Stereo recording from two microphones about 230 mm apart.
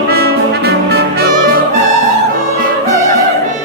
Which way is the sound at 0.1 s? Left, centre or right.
Right.